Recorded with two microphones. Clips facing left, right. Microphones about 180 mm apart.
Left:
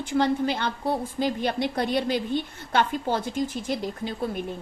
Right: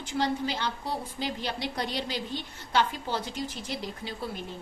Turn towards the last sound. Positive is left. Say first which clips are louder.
# left 7 dB
turn(degrees=50)  # may be behind; listen again after turning